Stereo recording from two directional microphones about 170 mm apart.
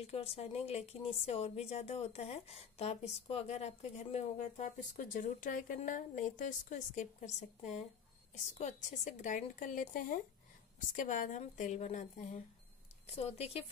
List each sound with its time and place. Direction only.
0.0 s a woman's voice: 35° left (ahead or behind)
13.1 s a woman's voice: 35° left (ahead or behind)